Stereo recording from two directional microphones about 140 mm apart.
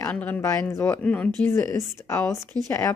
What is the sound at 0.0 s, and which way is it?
Speech, 10° left (ahead or behind).